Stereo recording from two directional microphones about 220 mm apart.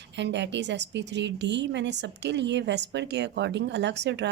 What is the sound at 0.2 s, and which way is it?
A woman's voice, 55° right (ahead or behind).